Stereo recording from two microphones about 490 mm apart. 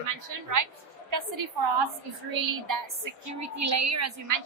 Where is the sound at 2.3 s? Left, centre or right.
Right.